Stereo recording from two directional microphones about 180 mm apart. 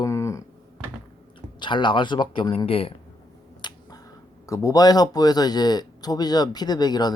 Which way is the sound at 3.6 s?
25° left (ahead or behind).